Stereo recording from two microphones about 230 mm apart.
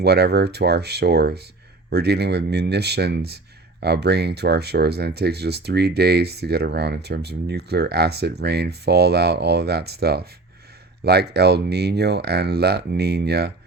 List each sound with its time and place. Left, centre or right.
0.0 s speech: right